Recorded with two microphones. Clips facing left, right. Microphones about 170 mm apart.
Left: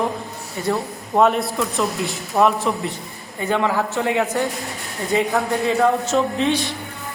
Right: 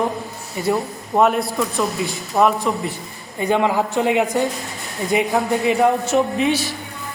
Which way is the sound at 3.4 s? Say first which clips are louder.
Right 2 dB; 15° right (ahead or behind).